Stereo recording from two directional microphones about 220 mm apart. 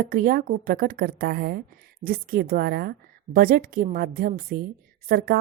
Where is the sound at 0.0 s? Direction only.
40° right (ahead or behind).